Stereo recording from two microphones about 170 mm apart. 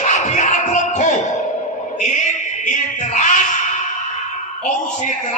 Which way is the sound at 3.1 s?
45° left (ahead or behind).